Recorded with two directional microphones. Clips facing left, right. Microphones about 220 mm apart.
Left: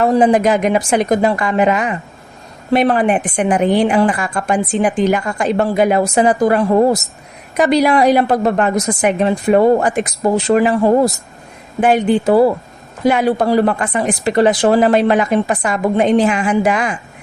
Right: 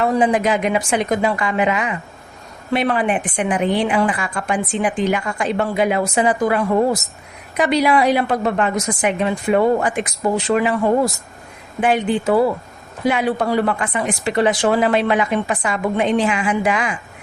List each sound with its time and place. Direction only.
0.0 s a woman's voice: 40° left (ahead or behind)